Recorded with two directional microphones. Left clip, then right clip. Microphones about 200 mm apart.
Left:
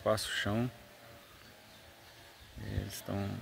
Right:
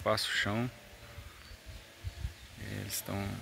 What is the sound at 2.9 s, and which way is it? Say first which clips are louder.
Speech: right 2 dB; 25° left (ahead or behind).